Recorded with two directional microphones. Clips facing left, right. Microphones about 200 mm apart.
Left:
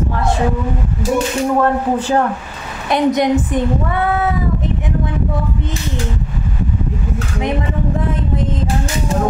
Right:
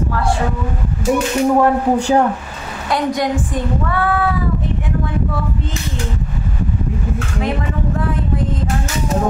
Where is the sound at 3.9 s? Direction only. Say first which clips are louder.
Left 1 dB; 20° left (ahead or behind).